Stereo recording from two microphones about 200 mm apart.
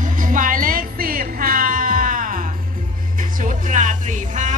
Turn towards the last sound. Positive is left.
turn(degrees=-40)  # may be behind; listen again after turning